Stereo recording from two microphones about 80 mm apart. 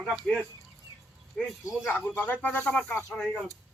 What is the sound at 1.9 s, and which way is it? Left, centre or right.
Speech, centre.